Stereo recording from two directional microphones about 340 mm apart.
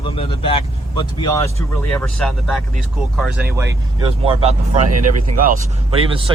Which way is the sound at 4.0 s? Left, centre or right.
Centre.